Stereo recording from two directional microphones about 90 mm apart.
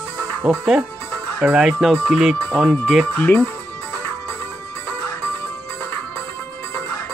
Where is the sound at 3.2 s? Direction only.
20° left (ahead or behind).